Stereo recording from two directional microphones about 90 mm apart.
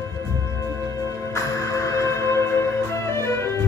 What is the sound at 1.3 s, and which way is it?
Music, 35° left (ahead or behind).